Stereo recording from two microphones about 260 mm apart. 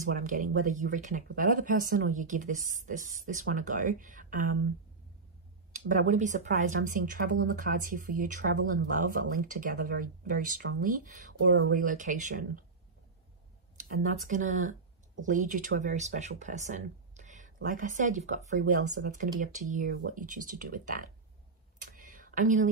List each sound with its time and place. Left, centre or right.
0.7 s speech: right
5.7 s speech: right
13.7 s speech: right
21.8 s a sound: right